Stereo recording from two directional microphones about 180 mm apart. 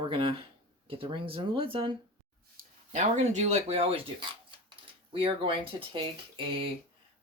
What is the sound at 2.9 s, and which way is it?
Speech, 40° right (ahead or behind).